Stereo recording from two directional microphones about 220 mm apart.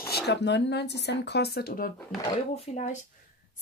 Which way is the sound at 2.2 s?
25° left (ahead or behind).